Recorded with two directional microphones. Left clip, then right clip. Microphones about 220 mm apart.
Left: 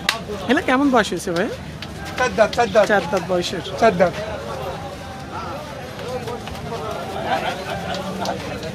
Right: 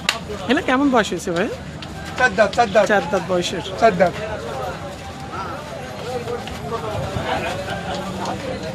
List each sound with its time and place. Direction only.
0.0 s speech: centre (ahead or behind)
3.8 s speech: 25° left (ahead or behind)